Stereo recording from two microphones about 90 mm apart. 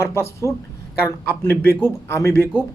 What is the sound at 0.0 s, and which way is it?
A man's voice, 30° left (ahead or behind).